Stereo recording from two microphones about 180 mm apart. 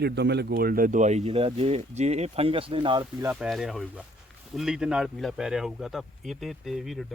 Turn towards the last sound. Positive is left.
turn(degrees=0)  # may be behind; listen again after turning